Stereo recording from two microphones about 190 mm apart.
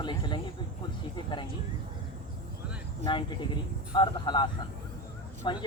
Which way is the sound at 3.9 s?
25° left (ahead or behind).